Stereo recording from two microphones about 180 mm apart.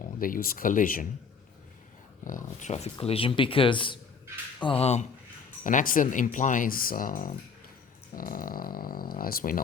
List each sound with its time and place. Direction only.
0.0 s speech: 50° left (ahead or behind)
2.2 s speech: 45° left (ahead or behind)
5.6 s speech: 50° left (ahead or behind)